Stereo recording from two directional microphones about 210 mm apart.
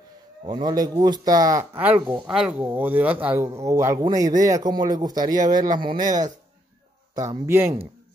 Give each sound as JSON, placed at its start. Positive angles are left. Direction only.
{"t": 0.5, "sound": "speech", "side_deg": -20}